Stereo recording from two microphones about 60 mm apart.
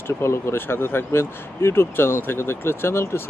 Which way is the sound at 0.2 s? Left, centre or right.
Left.